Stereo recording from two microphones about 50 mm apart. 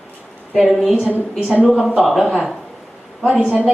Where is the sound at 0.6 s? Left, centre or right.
Centre.